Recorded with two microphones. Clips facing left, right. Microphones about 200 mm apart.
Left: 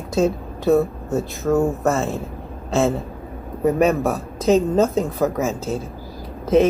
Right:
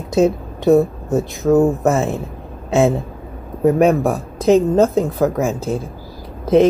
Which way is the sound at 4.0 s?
10° right (ahead or behind).